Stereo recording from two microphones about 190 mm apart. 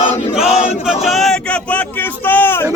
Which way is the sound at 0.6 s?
Centre (ahead or behind).